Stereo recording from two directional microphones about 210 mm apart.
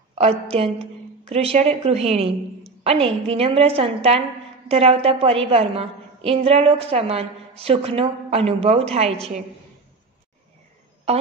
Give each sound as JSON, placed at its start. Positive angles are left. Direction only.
{"t": 0.5, "sound": "a woman's voice", "side_deg": -30}